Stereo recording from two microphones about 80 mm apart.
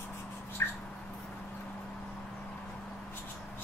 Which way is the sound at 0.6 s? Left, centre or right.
Left.